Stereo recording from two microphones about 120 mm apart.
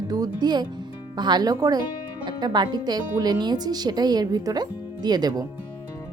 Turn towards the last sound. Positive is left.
turn(degrees=-35)  # may be behind; listen again after turning